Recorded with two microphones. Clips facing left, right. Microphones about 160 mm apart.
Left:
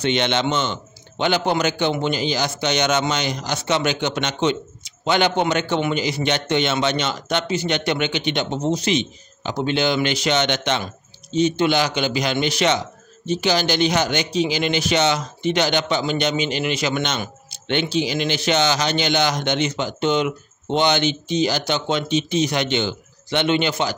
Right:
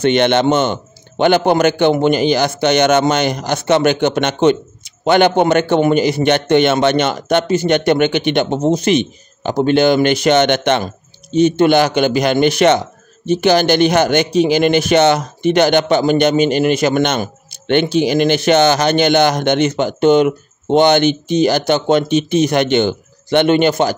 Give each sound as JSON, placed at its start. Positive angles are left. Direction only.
{"t": 0.0, "sound": "a man's voice", "side_deg": -55}